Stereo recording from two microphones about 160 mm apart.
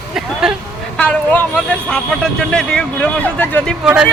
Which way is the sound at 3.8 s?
5° right (ahead or behind).